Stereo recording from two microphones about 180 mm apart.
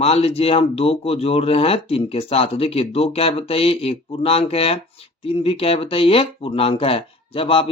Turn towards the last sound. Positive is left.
turn(degrees=30)  # may be behind; listen again after turning